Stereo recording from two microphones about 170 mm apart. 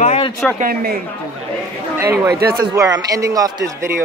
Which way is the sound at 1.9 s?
15° right (ahead or behind).